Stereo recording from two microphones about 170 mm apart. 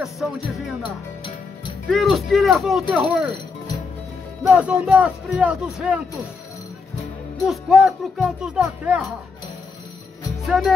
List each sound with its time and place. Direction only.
1.9 s speech: centre (ahead or behind)
4.5 s speech: 5° right (ahead or behind)
7.4 s speech: centre (ahead or behind)
10.4 s music: centre (ahead or behind)